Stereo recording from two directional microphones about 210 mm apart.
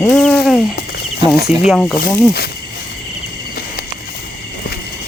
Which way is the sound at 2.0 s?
50° left (ahead or behind).